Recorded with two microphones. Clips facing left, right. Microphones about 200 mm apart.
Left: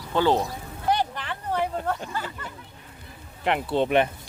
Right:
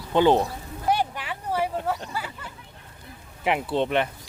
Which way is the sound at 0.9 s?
10° right (ahead or behind).